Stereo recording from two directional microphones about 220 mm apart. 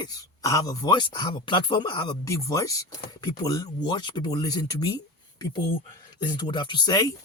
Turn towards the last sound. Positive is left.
turn(degrees=15)  # may be behind; listen again after turning